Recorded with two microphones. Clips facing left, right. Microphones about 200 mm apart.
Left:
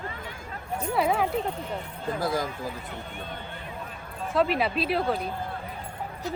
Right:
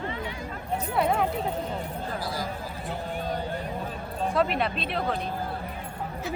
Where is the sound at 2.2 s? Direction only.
50° left (ahead or behind).